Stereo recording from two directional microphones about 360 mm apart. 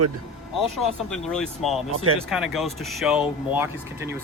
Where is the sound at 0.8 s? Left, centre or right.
Centre.